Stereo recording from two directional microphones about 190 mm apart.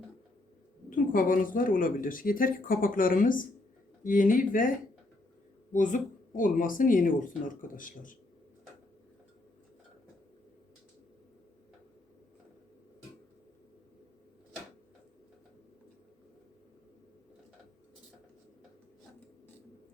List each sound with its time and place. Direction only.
0.9 s speech: 45° left (ahead or behind)
5.7 s speech: 45° left (ahead or behind)